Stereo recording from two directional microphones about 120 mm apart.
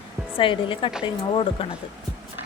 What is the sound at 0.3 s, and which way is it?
Speech, 45° left (ahead or behind).